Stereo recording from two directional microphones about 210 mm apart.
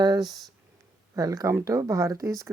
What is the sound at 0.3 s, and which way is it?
Speech, centre (ahead or behind).